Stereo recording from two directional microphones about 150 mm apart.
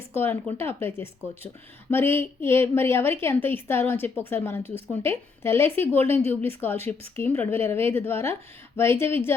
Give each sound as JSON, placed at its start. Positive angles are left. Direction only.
{"t": 0.1, "sound": "a woman's voice", "side_deg": 15}